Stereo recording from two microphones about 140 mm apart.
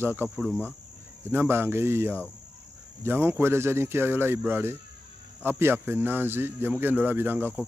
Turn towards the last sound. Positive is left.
turn(degrees=-15)  # may be behind; listen again after turning